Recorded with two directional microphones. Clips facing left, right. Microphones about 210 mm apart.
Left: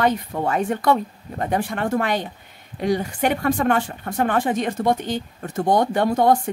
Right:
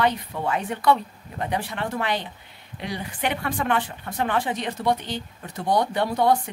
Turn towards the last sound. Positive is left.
turn(degrees=45)  # may be behind; listen again after turning